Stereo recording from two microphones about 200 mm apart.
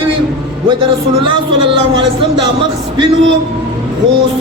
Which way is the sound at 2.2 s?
25° right (ahead or behind).